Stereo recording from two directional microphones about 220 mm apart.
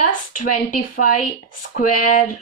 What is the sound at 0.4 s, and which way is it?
Speech, 35° left (ahead or behind).